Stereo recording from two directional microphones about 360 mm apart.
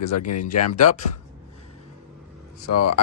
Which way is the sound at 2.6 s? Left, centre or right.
Left.